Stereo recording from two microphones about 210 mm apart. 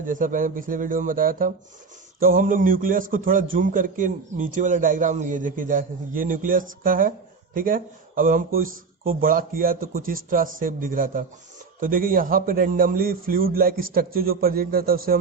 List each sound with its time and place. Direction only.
0.0 s a man's voice: 40° right (ahead or behind)